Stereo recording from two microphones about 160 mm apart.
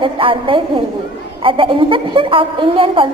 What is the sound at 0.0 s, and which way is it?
A woman's voice, 35° right (ahead or behind).